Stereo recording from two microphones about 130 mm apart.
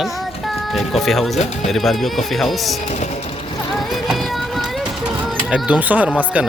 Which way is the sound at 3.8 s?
Centre (ahead or behind).